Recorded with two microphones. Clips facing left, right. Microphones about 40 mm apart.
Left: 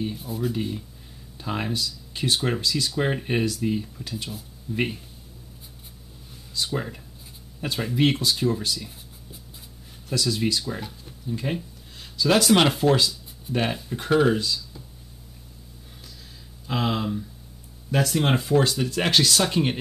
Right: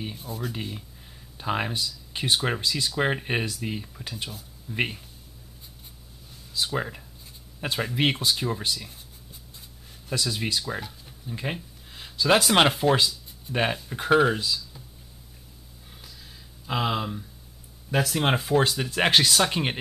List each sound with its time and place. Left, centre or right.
0.1 s speech: centre
0.5 s speech: centre
6.5 s speech: centre
10.0 s speech: centre
10.7 s speech: centre
11.2 s speech: centre
11.5 s a sound: centre
12.4 s speech: centre
16.6 s speech: centre
18.7 s speech: centre